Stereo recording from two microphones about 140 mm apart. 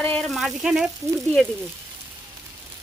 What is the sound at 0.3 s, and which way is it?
Speech, centre (ahead or behind).